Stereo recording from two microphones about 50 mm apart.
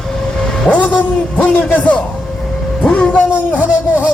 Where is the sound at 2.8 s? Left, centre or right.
Left.